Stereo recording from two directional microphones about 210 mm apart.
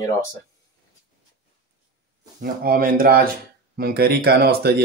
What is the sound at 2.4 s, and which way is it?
Speech, 45° right (ahead or behind).